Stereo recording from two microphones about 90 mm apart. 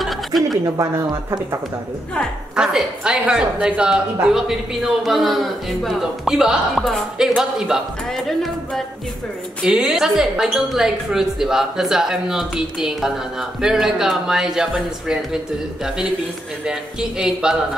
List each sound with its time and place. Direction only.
0.0 s a sound: centre (ahead or behind)
0.7 s speech: 35° right (ahead or behind)
2.5 s a woman's voice: 10° right (ahead or behind)
9.6 s a woman's voice: 5° right (ahead or behind)
16.6 s a woman's voice: 10° right (ahead or behind)